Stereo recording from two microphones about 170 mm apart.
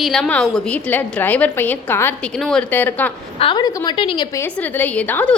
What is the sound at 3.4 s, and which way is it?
Speech, 30° left (ahead or behind).